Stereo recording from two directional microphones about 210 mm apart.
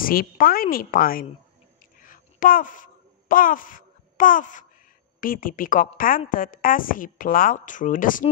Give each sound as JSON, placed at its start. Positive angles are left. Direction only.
{"t": 0.0, "sound": "a woman's voice", "side_deg": 45}
{"t": 2.0, "sound": "a sound", "side_deg": 40}
{"t": 5.2, "sound": "a woman's voice", "side_deg": 40}